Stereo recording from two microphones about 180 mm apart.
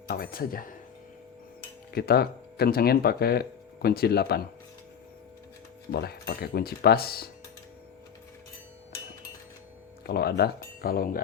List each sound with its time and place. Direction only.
0.1 s speech: 55° left (ahead or behind)
1.9 s speech: 60° left (ahead or behind)
5.9 s speech: 65° left (ahead or behind)
10.1 s speech: 60° left (ahead or behind)